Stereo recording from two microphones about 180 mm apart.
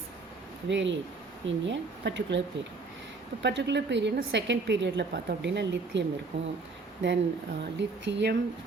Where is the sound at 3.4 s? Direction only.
70° right (ahead or behind).